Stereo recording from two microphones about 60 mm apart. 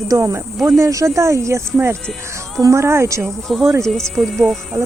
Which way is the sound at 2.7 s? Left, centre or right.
Right.